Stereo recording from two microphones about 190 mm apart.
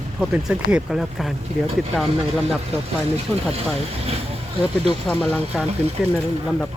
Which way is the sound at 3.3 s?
5° left (ahead or behind).